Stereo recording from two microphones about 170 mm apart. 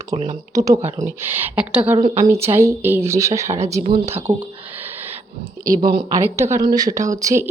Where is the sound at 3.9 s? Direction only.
15° right (ahead or behind).